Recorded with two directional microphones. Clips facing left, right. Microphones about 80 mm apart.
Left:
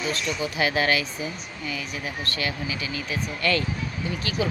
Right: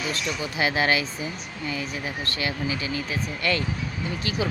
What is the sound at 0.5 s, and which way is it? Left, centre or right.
Speech, right.